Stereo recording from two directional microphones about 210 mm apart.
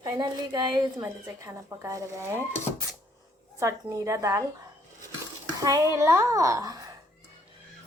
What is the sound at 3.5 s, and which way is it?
Speech, 15° right (ahead or behind).